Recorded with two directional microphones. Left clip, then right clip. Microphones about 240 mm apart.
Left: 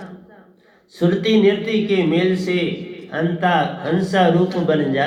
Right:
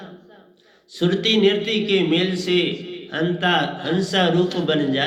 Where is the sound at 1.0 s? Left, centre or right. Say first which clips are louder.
Left 1 dB; right.